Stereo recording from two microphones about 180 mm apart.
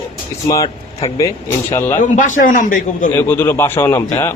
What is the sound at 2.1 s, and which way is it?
Speech, 45° left (ahead or behind).